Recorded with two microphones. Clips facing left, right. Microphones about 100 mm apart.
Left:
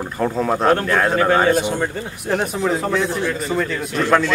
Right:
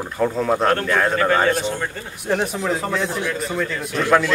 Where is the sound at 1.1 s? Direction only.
15° left (ahead or behind).